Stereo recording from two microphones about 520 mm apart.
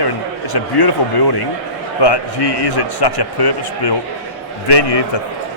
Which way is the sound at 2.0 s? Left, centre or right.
Left.